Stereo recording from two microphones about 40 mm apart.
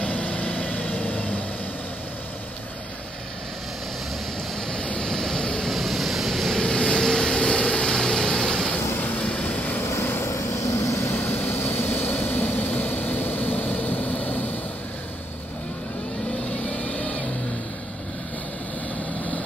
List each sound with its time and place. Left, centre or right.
0.0 s vehicle: left
5.0 s vehicle: centre
5.7 s vehicle: centre
6.6 s vehicle: left
8.9 s vehicle: left
9.2 s vehicle: left
10.0 s vehicle: left
11.1 s vehicle: left
16.4 s vehicle: left